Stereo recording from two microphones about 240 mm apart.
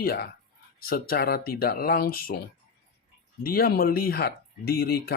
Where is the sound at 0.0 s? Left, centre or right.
Left.